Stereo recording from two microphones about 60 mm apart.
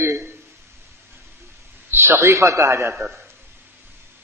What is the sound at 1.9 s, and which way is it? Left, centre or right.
A man's voice, right.